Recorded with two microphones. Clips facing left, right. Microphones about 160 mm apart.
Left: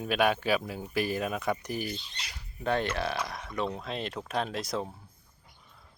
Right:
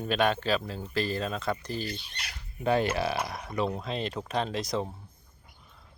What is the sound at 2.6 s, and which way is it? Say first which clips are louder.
Speech: right 3 dB; 5° right (ahead or behind).